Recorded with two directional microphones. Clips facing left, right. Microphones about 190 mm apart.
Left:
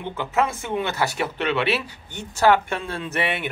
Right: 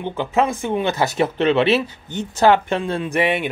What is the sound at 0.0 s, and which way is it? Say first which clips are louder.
Speech: right 4 dB; 20° right (ahead or behind).